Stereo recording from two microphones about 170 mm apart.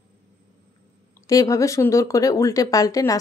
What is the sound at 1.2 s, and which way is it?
A woman's voice, 20° left (ahead or behind).